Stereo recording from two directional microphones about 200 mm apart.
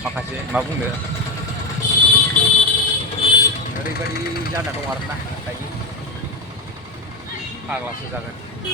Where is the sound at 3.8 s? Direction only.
50° left (ahead or behind).